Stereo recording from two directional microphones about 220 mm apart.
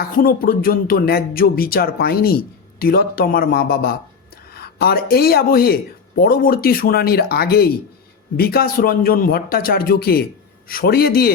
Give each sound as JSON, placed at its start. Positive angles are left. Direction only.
{"t": 0.2, "sound": "speech", "side_deg": 40}